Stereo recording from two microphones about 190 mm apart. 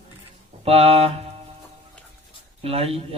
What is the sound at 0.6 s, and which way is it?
Speech, 30° right (ahead or behind).